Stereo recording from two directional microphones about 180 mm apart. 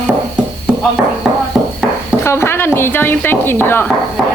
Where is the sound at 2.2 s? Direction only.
15° left (ahead or behind).